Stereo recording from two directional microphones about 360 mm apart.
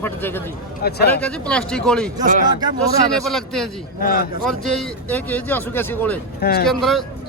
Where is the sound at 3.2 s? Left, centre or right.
Centre.